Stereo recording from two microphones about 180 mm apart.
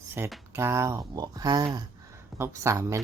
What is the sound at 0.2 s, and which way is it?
Speech, 15° right (ahead or behind).